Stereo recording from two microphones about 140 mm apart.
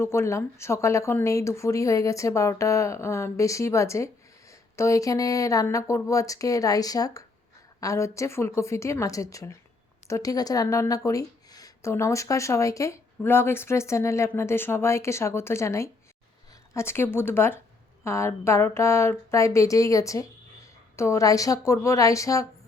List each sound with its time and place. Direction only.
0.0 s speech: 20° left (ahead or behind)